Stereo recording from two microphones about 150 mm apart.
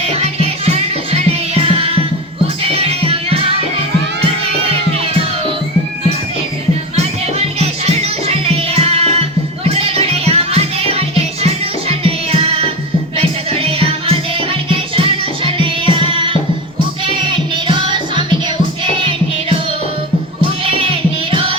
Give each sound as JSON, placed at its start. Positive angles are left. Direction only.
{"t": 0.0, "sound": "music", "side_deg": -40}
{"t": 6.9, "sound": "music", "side_deg": -45}
{"t": 20.7, "sound": "music", "side_deg": -40}